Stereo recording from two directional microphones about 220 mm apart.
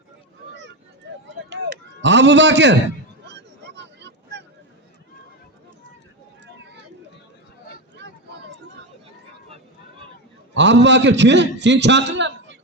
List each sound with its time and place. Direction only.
1.0 s a sound: 55° right (ahead or behind)
8.0 s vehicle: 50° right (ahead or behind)
10.5 s a man's voice: 55° right (ahead or behind)